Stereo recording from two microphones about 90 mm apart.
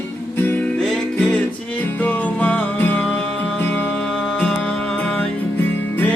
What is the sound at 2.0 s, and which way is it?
Music, 15° left (ahead or behind).